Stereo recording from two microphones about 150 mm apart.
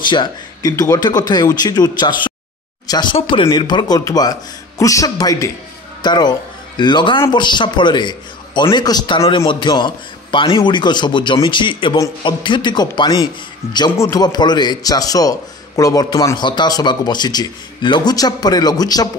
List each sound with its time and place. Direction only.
0.1 s a man's voice: 25° left (ahead or behind)